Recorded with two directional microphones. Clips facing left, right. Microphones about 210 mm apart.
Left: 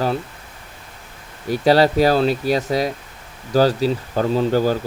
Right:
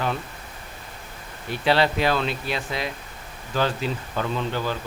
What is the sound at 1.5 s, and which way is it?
Speech, 40° left (ahead or behind).